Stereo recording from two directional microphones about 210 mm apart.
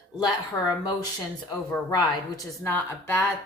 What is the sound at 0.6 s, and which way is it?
Speech, 20° left (ahead or behind).